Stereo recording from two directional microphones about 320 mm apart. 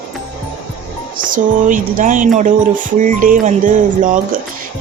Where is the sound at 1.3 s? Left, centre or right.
Right.